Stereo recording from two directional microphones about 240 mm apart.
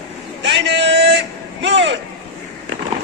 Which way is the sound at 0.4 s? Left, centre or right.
Right.